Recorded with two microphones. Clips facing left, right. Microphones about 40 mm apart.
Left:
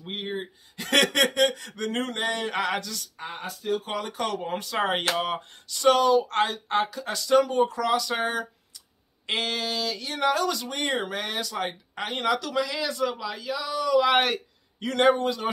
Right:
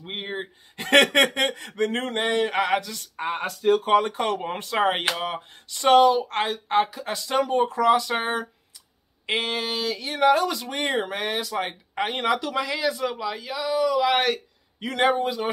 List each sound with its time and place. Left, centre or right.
0.0 s a sound: right
1.9 s speech: right
3.2 s speech: right
4.2 s speech: right
5.1 s a man's voice: centre
5.5 s speech: right
13.9 s speech: centre
14.8 s a man's voice: centre